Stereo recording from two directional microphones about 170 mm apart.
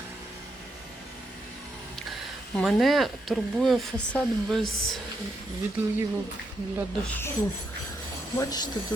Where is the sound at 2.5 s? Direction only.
Centre (ahead or behind).